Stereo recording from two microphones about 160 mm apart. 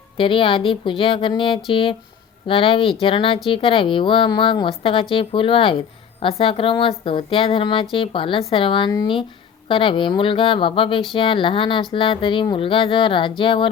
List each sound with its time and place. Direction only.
0.2 s speech: 35° left (ahead or behind)